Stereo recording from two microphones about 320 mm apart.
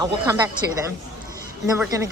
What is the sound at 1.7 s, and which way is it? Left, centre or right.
Speech, centre.